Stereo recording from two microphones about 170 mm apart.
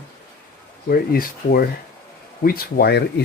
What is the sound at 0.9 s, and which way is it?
Speech, 60° left (ahead or behind).